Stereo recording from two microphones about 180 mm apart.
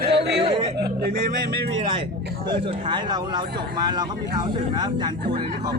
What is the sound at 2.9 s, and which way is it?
Speech, 25° right (ahead or behind).